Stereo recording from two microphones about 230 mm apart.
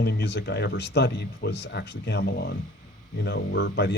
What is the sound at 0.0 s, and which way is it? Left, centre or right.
Speech, left.